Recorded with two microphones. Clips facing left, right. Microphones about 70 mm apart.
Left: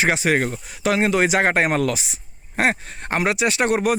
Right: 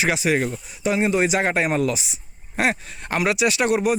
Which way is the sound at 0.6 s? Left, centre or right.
Left.